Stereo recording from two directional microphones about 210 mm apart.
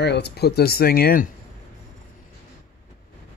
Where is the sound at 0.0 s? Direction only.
50° left (ahead or behind).